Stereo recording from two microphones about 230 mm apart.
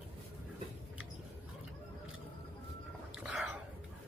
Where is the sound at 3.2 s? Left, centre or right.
Centre.